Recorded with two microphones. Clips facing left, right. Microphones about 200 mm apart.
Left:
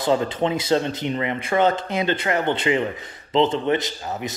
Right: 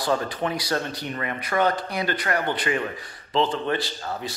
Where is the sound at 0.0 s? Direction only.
20° left (ahead or behind).